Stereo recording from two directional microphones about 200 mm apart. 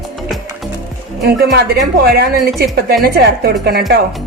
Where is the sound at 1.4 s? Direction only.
50° right (ahead or behind).